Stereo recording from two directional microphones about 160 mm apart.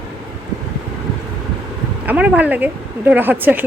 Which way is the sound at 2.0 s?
10° right (ahead or behind).